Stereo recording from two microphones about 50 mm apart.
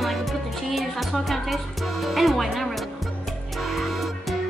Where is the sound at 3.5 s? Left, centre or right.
Centre.